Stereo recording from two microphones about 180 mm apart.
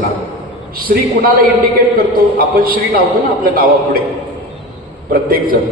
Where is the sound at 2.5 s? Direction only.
55° right (ahead or behind).